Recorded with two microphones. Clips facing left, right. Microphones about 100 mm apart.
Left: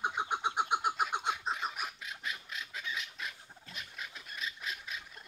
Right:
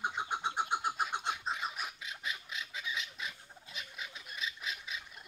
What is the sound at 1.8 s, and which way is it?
Squawk, centre (ahead or behind).